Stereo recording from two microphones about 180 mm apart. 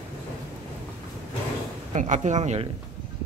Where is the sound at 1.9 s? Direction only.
40° right (ahead or behind).